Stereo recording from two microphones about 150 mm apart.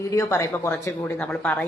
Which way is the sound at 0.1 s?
20° left (ahead or behind).